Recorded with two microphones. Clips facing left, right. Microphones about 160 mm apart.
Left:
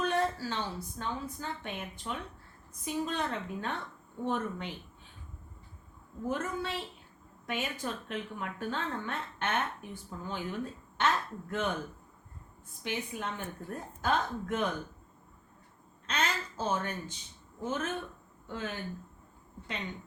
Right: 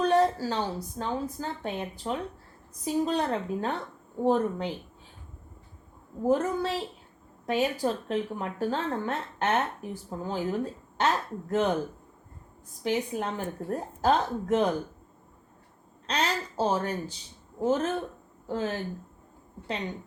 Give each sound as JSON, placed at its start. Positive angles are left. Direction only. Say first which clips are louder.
{"t": 0.0, "sound": "speech", "louder": "right 7 dB", "side_deg": -35}
{"t": 6.2, "sound": "speech", "louder": "right 9 dB", "side_deg": -35}
{"t": 12.8, "sound": "speech", "louder": "right 8 dB", "side_deg": -40}
{"t": 16.0, "sound": "speech", "louder": "right 4 dB", "side_deg": -35}